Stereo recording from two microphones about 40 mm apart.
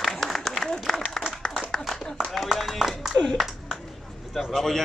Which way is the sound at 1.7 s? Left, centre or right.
Centre.